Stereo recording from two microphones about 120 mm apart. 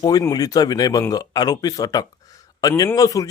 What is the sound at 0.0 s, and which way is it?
Speech, 30° left (ahead or behind).